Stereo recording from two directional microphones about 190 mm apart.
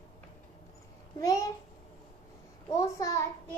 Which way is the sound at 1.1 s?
15° left (ahead or behind).